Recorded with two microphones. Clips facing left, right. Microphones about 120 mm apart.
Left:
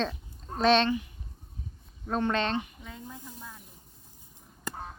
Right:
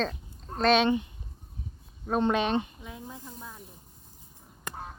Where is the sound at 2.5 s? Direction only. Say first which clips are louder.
Right 4 dB; 30° right (ahead or behind).